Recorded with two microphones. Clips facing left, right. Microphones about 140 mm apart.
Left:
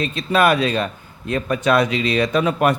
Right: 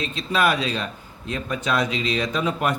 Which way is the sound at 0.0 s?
55° left (ahead or behind).